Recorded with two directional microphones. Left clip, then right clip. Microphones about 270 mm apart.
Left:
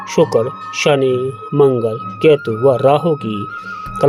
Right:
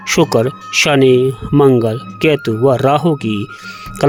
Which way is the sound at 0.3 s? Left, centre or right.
Right.